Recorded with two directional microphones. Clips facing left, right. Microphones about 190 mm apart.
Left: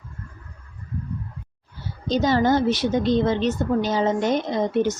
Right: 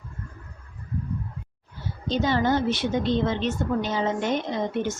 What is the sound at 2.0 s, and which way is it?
A woman's voice, 40° left (ahead or behind).